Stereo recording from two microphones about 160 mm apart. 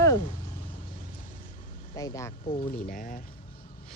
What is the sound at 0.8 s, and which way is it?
Vehicle, 60° left (ahead or behind).